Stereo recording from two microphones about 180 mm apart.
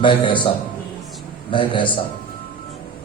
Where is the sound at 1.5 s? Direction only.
25° left (ahead or behind).